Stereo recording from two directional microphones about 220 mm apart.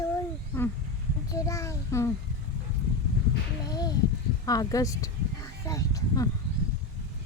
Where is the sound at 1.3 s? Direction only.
15° left (ahead or behind).